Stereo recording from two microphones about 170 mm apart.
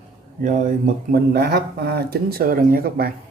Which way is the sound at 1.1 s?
70° right (ahead or behind).